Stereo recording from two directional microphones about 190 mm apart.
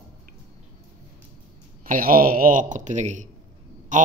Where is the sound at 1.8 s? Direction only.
50° right (ahead or behind).